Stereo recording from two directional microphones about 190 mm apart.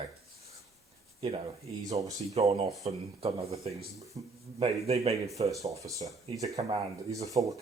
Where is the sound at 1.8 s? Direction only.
20° right (ahead or behind).